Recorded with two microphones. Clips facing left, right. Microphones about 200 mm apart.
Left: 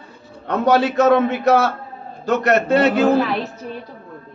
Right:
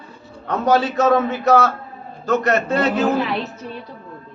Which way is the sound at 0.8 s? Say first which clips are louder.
Left 2 dB; 65° left (ahead or behind).